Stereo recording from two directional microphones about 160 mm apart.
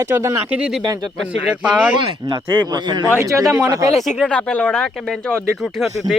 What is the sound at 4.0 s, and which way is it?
Speech, centre (ahead or behind).